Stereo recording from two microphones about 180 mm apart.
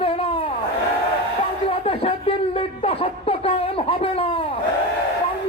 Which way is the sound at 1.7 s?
30° left (ahead or behind).